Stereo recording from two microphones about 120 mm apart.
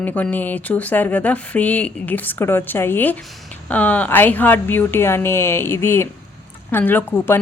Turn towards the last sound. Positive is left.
turn(degrees=20)  # may be behind; listen again after turning